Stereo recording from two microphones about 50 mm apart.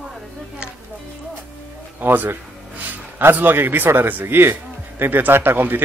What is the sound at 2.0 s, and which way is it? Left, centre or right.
A man's voice, right.